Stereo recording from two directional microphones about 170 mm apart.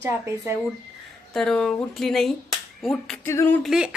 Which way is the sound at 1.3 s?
5° left (ahead or behind).